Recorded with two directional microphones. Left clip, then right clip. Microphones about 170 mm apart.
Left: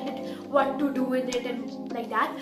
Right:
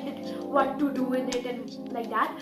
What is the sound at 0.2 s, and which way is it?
Speech, centre (ahead or behind).